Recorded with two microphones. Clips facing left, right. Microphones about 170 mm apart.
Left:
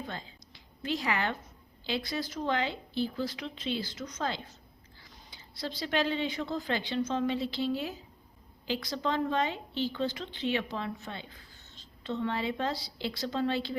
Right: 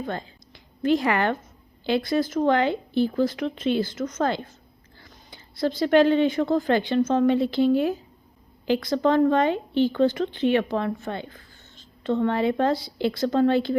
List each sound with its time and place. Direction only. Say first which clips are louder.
0.0 s a woman's voice: right 9 dB; 55° right (ahead or behind)